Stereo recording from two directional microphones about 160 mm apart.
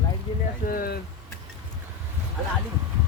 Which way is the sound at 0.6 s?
65° left (ahead or behind).